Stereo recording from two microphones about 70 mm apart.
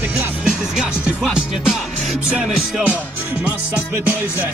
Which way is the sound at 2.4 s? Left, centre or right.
Centre.